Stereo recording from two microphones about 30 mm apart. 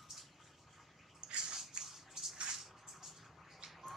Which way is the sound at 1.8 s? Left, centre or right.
Centre.